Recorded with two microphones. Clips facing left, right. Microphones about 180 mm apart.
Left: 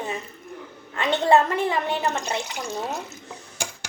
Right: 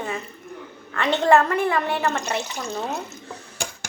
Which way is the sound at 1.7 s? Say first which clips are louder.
Right 2 dB; 20° left (ahead or behind).